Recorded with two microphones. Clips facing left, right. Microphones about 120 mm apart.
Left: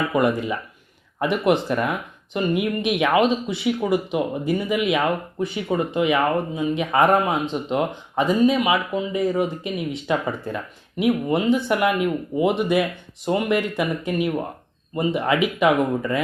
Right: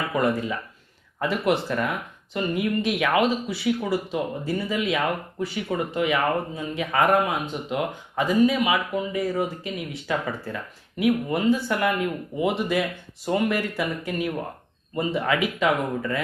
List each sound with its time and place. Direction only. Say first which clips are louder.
0.1 s speech: left 3 dB; 20° left (ahead or behind)